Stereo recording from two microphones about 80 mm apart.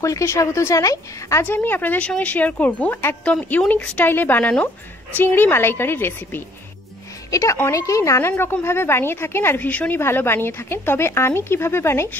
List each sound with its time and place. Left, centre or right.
0.0 s speech: left
1.4 s speech: left
7.2 s a woman's voice: left
9.7 s speech: centre
9.9 s speech: left